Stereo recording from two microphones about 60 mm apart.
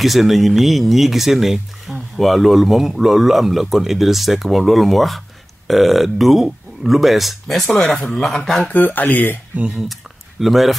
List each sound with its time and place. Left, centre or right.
0.0 s speech: centre
8.6 s speech: left
9.7 s speech: centre